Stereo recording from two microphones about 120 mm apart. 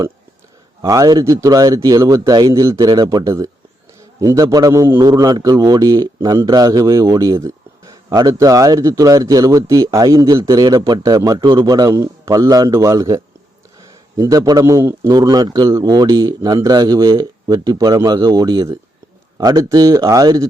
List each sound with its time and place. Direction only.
0.8 s a man's voice: 30° right (ahead or behind)